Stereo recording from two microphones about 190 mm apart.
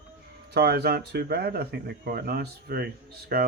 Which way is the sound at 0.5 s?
60° right (ahead or behind).